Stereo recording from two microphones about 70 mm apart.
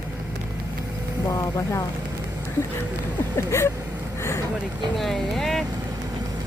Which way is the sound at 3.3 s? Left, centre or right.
Left.